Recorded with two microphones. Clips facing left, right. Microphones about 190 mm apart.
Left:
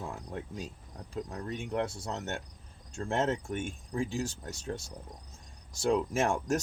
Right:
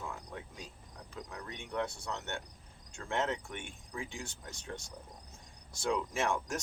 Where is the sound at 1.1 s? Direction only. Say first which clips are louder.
Left 8 dB; 35° left (ahead or behind).